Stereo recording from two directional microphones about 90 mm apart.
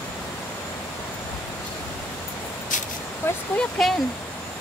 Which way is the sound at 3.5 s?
5° left (ahead or behind).